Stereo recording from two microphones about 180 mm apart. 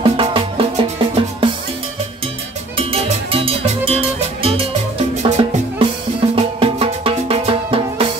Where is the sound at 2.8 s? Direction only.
30° right (ahead or behind).